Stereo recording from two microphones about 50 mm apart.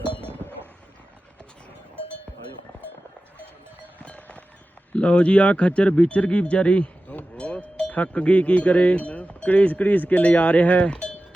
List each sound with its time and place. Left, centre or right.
3.9 s a sound: left
4.9 s speech: left
7.3 s cowbell: left